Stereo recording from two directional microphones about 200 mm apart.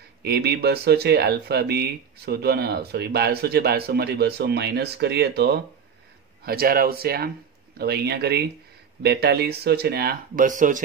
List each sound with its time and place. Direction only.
0.2 s speech: 50° right (ahead or behind)